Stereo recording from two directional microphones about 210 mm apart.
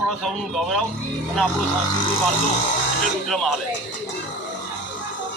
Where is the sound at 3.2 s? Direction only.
Centre (ahead or behind).